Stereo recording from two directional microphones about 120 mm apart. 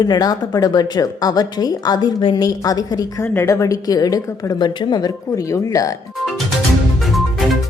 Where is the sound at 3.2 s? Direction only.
20° left (ahead or behind).